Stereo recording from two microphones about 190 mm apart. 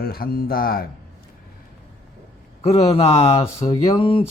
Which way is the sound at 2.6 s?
30° left (ahead or behind).